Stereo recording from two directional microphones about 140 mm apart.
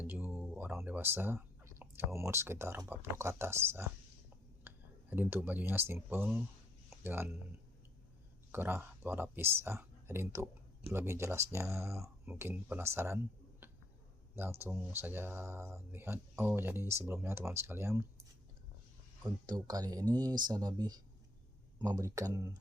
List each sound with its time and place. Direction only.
0.0 s speech: 10° right (ahead or behind)
8.5 s speech: 15° right (ahead or behind)
14.6 s speech: 15° right (ahead or behind)
19.5 s speech: 30° right (ahead or behind)